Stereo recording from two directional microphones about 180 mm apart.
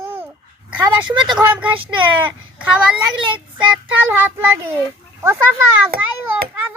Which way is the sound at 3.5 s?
10° right (ahead or behind).